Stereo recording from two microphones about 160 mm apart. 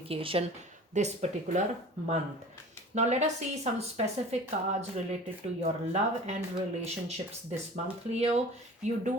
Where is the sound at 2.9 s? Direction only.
45° right (ahead or behind).